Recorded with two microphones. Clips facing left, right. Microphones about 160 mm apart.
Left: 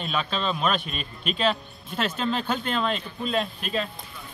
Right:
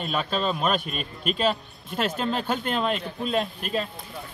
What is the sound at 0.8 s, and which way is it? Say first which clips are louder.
Speech: right 2 dB; 45° right (ahead or behind).